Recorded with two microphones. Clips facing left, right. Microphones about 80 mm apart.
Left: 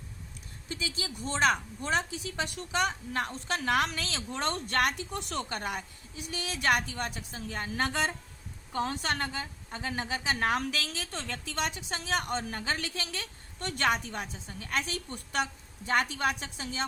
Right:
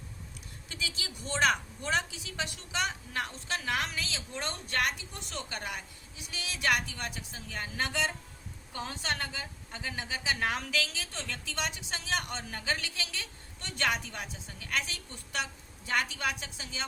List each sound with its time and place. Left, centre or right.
0.7 s a woman's voice: left
5.5 s a woman's voice: left